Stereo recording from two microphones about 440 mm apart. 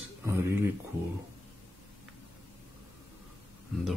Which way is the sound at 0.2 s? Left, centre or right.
Centre.